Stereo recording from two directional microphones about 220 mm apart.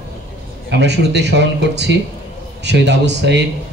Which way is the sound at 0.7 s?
50° right (ahead or behind).